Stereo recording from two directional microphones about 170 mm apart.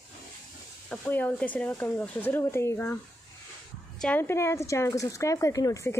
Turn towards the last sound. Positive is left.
turn(degrees=20)  # may be behind; listen again after turning